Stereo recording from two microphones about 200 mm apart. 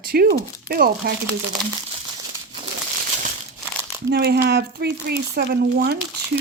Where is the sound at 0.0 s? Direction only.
50° right (ahead or behind).